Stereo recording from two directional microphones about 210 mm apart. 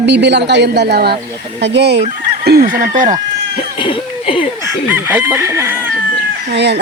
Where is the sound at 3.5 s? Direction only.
25° left (ahead or behind).